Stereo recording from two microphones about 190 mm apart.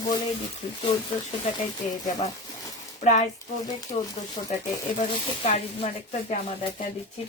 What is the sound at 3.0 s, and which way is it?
Speech, 40° left (ahead or behind).